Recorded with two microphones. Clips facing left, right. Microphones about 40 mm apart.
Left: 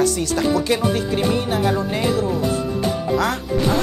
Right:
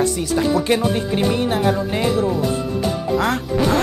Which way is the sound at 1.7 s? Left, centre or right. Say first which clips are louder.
Right 1 dB; centre.